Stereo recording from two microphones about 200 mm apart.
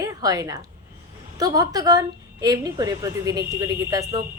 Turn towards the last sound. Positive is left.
turn(degrees=-20)  # may be behind; listen again after turning